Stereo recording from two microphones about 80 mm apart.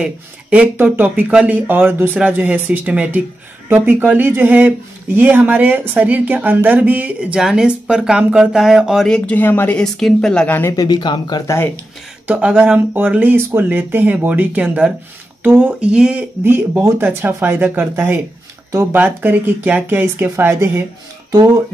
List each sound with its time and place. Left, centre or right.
0.0 s speech: centre
9.0 s speech: centre
9.3 s speech: left
9.8 s speech: centre
10.4 s speech: left
10.7 s speech: left
11.0 s speech: left
12.3 s speech: centre
16.4 s speech: right
18.9 s speech: right
21.3 s speech: right